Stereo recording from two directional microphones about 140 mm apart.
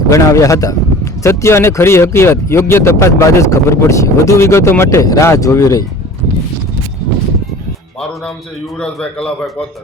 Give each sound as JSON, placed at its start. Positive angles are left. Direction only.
{"t": 0.1, "sound": "speech", "side_deg": 20}
{"t": 8.8, "sound": "a man's voice", "side_deg": 5}